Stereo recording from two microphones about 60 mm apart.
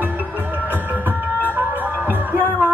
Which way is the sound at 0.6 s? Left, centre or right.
Right.